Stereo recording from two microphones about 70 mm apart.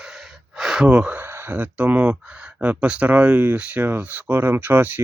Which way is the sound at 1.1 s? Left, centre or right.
Right.